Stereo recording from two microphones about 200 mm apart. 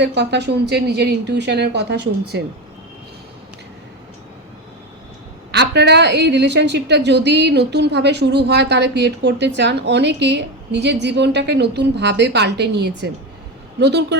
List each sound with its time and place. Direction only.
0.0 s a woman's voice: 60° right (ahead or behind)
5.5 s a woman's voice: 55° right (ahead or behind)